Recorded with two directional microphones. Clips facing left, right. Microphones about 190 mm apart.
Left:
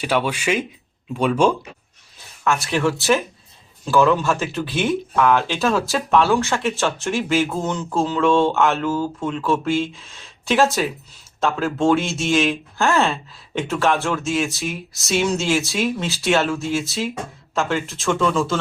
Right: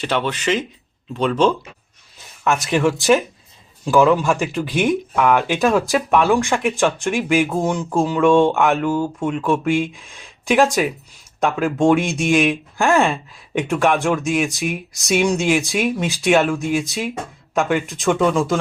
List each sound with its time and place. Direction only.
0.0 s speech: 10° left (ahead or behind)
2.4 s speech: 15° right (ahead or behind)